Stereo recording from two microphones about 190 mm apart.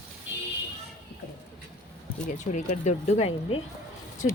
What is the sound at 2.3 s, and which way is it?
Speech, 40° left (ahead or behind).